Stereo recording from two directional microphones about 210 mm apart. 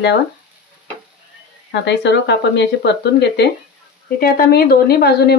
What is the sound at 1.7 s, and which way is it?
A woman's voice, 55° left (ahead or behind).